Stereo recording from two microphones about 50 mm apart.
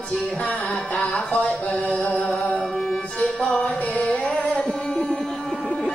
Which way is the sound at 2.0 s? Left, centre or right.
Left.